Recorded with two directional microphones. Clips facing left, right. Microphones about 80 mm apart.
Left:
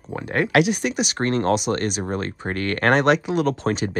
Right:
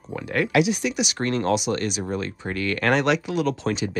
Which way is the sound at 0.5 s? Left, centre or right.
Left.